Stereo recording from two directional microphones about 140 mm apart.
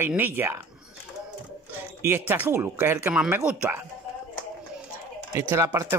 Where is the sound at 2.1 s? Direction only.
15° right (ahead or behind).